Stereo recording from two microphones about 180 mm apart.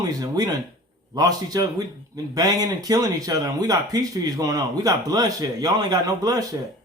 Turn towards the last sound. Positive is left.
turn(degrees=-20)  # may be behind; listen again after turning